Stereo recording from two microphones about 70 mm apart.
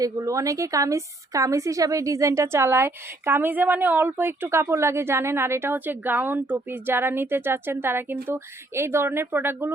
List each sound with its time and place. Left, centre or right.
0.0 s a woman's voice: right